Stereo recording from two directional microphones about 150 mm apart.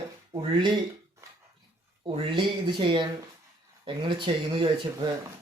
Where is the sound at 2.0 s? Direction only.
35° right (ahead or behind).